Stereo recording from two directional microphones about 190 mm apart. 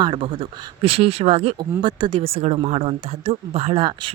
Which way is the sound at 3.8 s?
25° right (ahead or behind).